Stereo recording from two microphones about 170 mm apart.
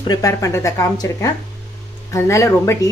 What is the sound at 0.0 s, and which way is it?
Speech, 20° left (ahead or behind).